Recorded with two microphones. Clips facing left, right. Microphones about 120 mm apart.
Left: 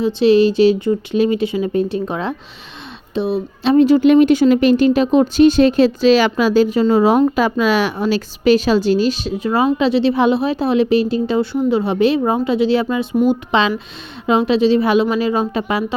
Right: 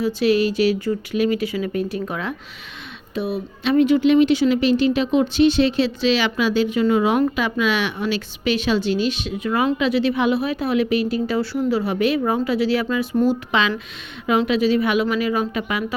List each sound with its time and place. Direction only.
0.0 s a woman's voice: 25° left (ahead or behind)